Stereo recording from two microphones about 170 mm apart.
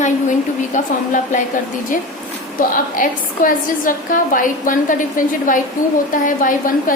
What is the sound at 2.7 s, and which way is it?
A woman's voice, 50° left (ahead or behind).